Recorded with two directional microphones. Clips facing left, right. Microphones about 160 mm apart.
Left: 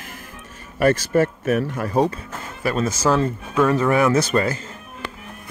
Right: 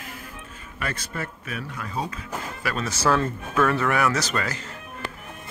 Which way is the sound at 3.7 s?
25° left (ahead or behind).